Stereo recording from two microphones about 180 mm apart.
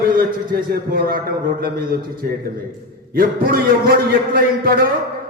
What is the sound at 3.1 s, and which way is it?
A man's voice, 55° right (ahead or behind).